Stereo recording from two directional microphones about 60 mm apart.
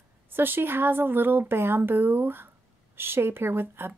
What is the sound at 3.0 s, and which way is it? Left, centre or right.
Speech, right.